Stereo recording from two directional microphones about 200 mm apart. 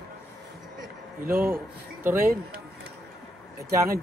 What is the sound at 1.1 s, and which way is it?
Speech, 45° right (ahead or behind).